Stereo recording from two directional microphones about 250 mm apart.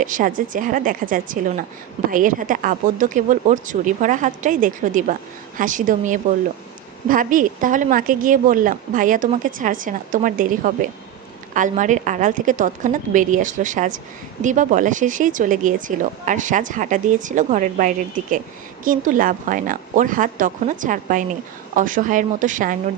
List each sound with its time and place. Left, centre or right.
0.0 s speech: right